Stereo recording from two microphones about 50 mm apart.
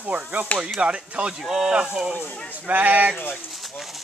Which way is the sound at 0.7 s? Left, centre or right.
Right.